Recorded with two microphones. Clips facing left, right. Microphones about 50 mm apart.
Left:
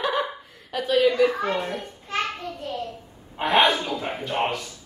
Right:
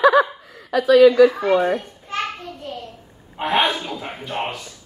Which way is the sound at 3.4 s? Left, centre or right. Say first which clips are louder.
Even; centre.